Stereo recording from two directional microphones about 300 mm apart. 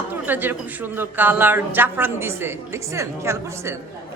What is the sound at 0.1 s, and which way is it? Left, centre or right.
A woman's voice, centre.